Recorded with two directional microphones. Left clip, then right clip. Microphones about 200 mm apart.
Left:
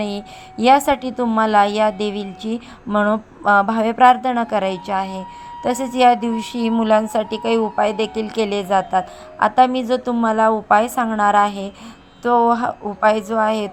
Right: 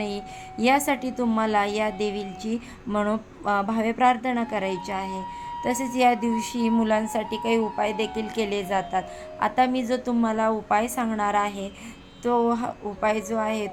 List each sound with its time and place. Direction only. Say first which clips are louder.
0.0 s a woman's voice: left 5 dB; 20° left (ahead or behind)